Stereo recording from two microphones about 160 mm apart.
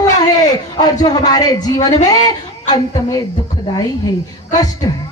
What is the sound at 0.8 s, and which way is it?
A woman's voice, 25° left (ahead or behind).